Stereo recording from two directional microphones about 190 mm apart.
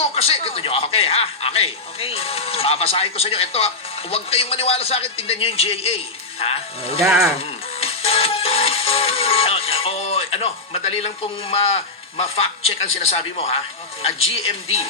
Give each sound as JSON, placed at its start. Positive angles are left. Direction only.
{"t": 0.0, "sound": "a man's voice", "side_deg": 30}
{"t": 7.0, "sound": "speech", "side_deg": 0}
{"t": 7.3, "sound": "music", "side_deg": 30}
{"t": 13.0, "sound": "a man's voice", "side_deg": 35}